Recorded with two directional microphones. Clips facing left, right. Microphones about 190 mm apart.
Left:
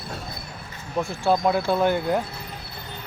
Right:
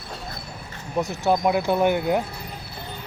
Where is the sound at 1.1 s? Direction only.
15° right (ahead or behind).